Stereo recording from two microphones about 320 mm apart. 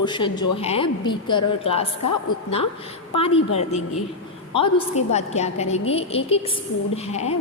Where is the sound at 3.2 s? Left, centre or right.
Centre.